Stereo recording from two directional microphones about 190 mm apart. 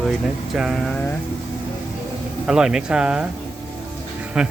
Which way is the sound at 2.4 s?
5° right (ahead or behind).